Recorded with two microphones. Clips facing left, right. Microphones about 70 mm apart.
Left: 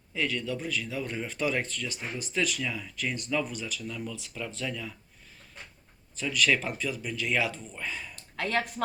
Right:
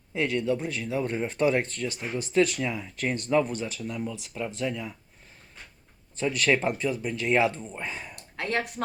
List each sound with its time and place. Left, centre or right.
0.2 s speech: right
2.9 s speech: right; by 4.9 s centre
6.1 s speech: right